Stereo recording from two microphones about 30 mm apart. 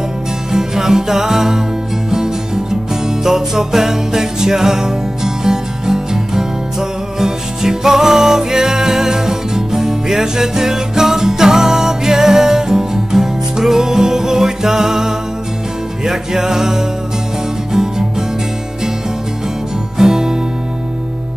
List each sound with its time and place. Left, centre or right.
0.5 s music: centre
20.0 s music: centre